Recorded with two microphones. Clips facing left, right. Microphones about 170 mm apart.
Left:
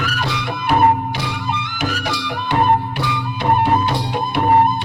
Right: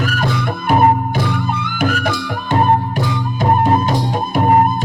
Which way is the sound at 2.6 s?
40° right (ahead or behind).